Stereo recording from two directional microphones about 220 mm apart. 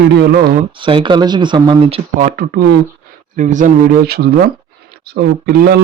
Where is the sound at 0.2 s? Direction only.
45° right (ahead or behind).